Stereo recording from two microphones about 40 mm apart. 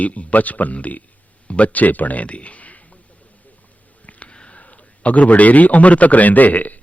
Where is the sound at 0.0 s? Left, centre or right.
Left.